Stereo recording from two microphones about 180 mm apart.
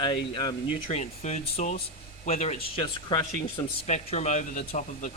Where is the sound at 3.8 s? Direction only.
40° left (ahead or behind).